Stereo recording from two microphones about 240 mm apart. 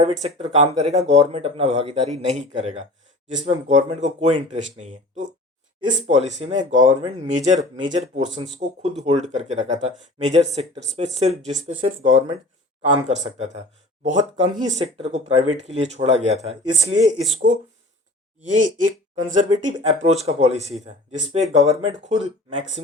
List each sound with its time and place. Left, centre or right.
0.0 s speech: right
18.5 s speech: right